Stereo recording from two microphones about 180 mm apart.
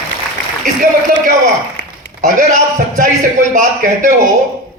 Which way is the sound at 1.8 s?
90° left.